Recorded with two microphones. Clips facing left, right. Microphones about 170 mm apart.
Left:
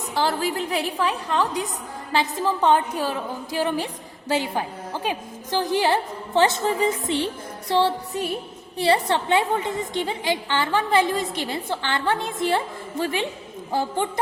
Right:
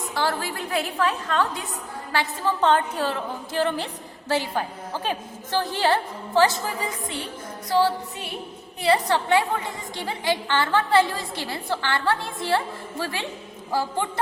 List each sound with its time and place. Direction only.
0.3 s a woman's voice: 15° left (ahead or behind)